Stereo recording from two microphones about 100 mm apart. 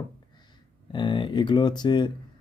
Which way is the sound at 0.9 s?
50° left (ahead or behind).